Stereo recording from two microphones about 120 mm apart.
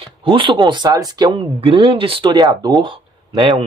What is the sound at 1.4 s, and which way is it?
Speech, 50° right (ahead or behind).